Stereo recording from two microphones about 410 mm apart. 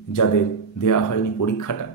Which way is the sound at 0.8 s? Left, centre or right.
Left.